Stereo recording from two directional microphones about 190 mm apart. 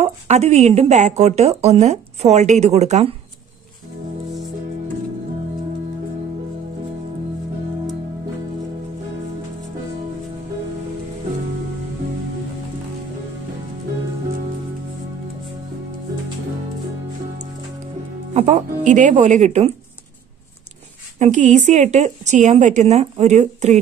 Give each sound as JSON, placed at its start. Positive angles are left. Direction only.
{"t": 0.0, "sound": "speech", "side_deg": -35}
{"t": 18.3, "sound": "speech", "side_deg": -35}
{"t": 21.2, "sound": "speech", "side_deg": -40}